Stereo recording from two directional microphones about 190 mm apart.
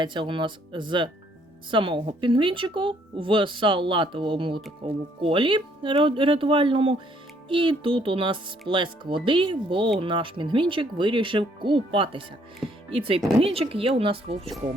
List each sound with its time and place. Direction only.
0.0 s speech: 25° right (ahead or behind)